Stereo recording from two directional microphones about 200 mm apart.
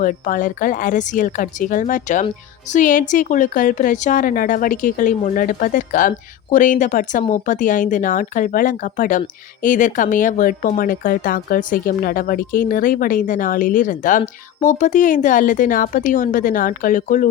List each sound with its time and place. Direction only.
0.0 s speech: 45° left (ahead or behind)